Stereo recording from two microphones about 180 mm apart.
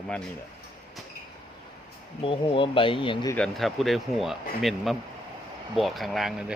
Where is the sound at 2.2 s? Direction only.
30° left (ahead or behind).